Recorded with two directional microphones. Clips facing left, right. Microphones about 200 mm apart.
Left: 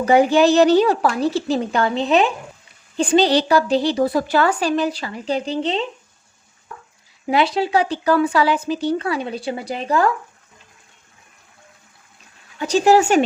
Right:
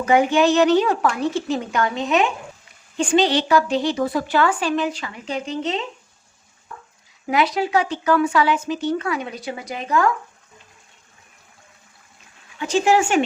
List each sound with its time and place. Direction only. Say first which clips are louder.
0.0 s a woman's voice: left 3 dB; 35° left (ahead or behind)
7.3 s a woman's voice: left 2 dB; 30° left (ahead or behind)
12.5 s a woman's voice: left 3 dB; 40° left (ahead or behind)